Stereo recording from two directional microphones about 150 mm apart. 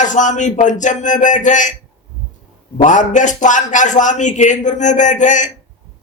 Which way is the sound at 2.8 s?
55° left (ahead or behind).